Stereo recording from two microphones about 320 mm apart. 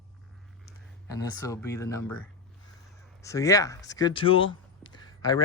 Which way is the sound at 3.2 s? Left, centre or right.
Centre.